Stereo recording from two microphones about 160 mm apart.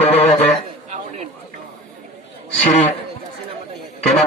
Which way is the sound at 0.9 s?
45° right (ahead or behind).